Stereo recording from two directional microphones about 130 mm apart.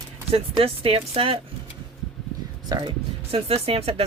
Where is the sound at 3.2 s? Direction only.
50° right (ahead or behind).